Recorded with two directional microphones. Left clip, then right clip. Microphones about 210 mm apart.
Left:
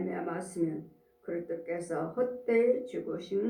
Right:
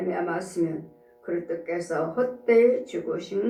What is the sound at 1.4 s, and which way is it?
Speech, 40° left (ahead or behind).